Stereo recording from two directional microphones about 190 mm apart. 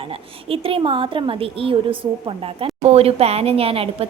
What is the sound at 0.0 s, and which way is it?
A woman's voice, 30° right (ahead or behind).